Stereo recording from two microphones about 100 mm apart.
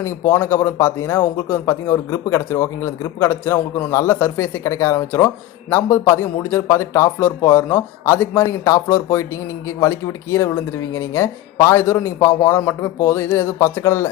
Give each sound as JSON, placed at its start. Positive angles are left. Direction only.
{"t": 0.0, "sound": "speech", "side_deg": 25}